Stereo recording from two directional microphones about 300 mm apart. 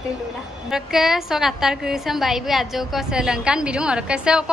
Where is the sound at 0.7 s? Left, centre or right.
Centre.